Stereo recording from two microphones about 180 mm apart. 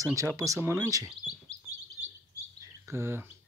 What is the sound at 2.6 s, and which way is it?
Bird, 15° right (ahead or behind).